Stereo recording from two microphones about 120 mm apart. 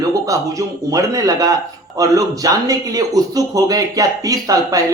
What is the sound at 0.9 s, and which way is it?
Speech, 30° right (ahead or behind).